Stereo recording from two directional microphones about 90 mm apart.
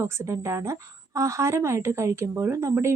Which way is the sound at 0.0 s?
30° right (ahead or behind).